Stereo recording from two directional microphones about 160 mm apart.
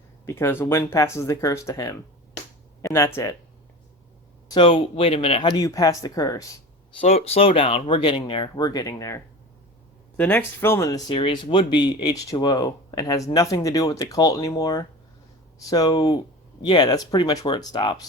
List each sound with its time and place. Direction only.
0.3 s speech: 15° left (ahead or behind)
4.4 s speech: 30° left (ahead or behind)
5.5 s speech: 20° left (ahead or behind)
7.0 s speech: 40° left (ahead or behind); by 9.2 s 20° left (ahead or behind)
10.2 s speech: 10° left (ahead or behind)
11.1 s speech: 30° left (ahead or behind)